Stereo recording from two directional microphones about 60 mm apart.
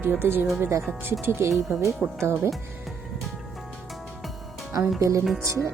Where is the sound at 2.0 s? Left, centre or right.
Centre.